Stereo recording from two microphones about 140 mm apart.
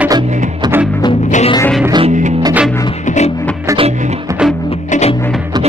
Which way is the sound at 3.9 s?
60° right (ahead or behind).